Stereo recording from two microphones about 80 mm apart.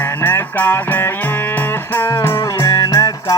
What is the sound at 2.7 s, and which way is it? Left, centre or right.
Music, left.